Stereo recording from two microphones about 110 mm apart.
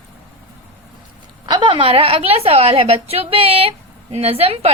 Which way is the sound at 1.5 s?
50° right (ahead or behind).